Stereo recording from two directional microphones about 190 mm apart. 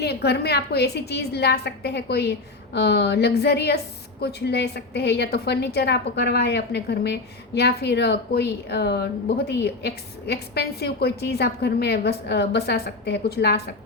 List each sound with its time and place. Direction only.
0.0 s a woman's voice: 60° left (ahead or behind)